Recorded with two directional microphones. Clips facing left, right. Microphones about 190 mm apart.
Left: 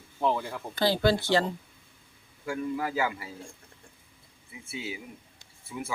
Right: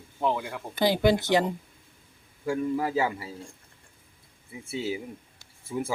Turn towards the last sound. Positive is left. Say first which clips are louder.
# right 6 dB
turn(degrees=-40)  # may be behind; listen again after turning